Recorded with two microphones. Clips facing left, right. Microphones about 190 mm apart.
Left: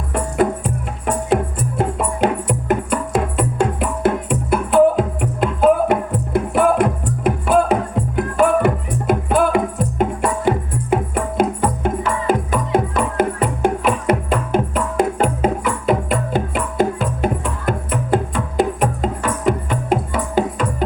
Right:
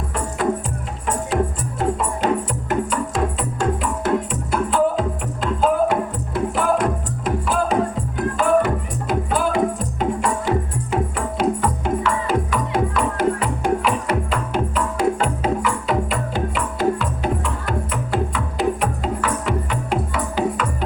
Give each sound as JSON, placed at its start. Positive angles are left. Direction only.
{"t": 0.1, "sound": "music", "side_deg": 60}